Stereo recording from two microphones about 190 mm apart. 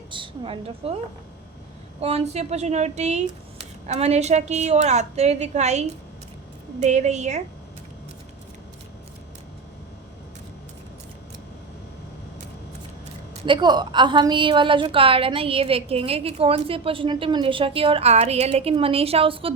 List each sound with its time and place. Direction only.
0.1 s a woman's voice: 25° right (ahead or behind)
2.0 s speech: 30° right (ahead or behind)
13.4 s a woman's voice: 25° right (ahead or behind)